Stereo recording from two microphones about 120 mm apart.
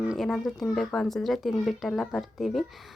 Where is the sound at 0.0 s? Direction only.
5° right (ahead or behind).